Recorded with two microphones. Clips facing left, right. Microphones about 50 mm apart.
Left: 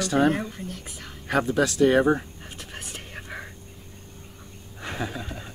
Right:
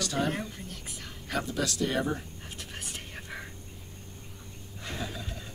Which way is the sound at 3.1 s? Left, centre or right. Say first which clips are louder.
Left 5 dB; left.